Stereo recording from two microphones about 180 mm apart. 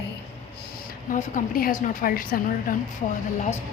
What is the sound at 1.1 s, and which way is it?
Speech, 55° left (ahead or behind).